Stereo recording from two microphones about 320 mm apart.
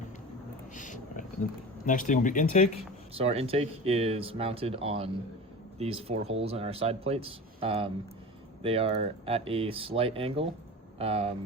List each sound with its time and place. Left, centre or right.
0.7 s a sound: left
1.8 s speech: left
3.2 s speech: centre